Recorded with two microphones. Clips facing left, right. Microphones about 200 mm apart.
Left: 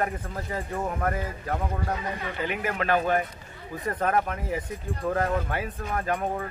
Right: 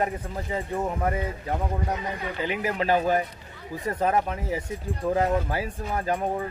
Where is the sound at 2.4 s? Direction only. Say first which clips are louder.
Right 2 dB; 30° right (ahead or behind).